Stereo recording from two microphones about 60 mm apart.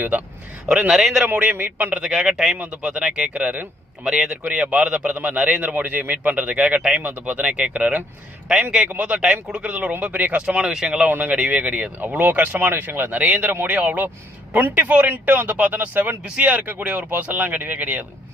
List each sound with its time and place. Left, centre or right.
0.9 s speech: centre
1.3 s speech: right
2.0 s speech: centre
2.6 s speech: right
4.0 s speech: centre
7.0 s speech: right
10.4 s speech: centre
11.1 s speech: right
16.8 s speech: centre